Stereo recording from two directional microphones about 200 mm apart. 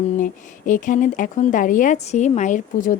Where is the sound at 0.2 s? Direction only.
40° left (ahead or behind).